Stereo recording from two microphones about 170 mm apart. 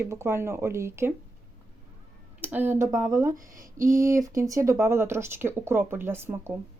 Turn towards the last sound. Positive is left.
turn(degrees=-15)  # may be behind; listen again after turning